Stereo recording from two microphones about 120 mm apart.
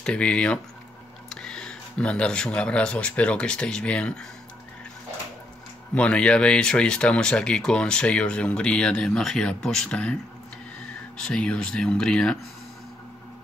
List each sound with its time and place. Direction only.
0.0 s speech: 10° left (ahead or behind)
5.9 s speech: 10° left (ahead or behind)
11.1 s speech: 5° left (ahead or behind)